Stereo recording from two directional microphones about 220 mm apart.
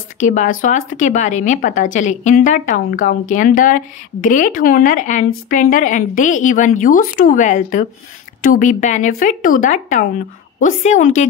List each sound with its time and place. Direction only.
0.2 s speech: 35° left (ahead or behind)